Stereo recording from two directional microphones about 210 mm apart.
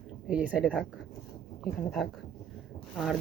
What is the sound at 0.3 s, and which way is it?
Speech, 5° right (ahead or behind).